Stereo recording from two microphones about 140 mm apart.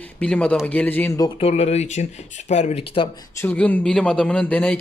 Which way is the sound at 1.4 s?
50° left (ahead or behind).